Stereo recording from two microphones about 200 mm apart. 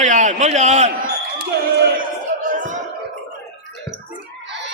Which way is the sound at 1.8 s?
40° right (ahead or behind).